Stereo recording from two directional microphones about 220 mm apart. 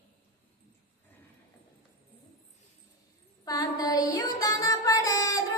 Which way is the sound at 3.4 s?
15° left (ahead or behind).